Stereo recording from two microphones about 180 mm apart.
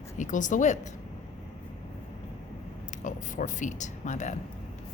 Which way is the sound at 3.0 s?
45° left (ahead or behind).